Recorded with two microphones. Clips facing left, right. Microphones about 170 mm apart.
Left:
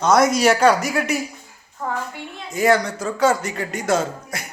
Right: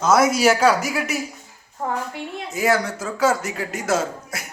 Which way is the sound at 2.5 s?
5° right (ahead or behind).